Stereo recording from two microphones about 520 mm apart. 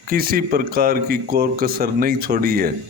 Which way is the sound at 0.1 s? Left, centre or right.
Centre.